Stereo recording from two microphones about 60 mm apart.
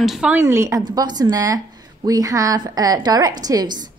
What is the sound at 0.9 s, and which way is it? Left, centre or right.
A woman's voice, right.